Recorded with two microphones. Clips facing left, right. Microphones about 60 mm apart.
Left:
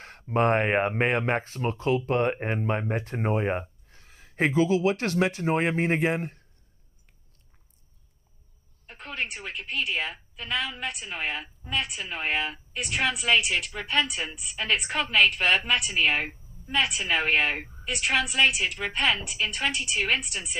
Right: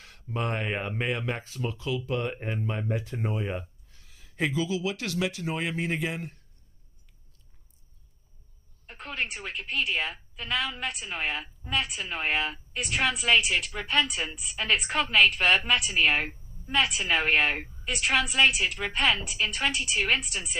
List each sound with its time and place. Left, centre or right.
0.0 s speech: left
8.8 s a woman's voice: centre